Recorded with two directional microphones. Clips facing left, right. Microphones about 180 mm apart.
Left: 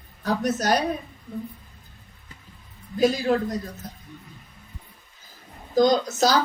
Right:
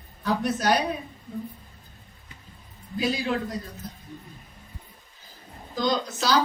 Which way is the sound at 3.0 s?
45° left (ahead or behind).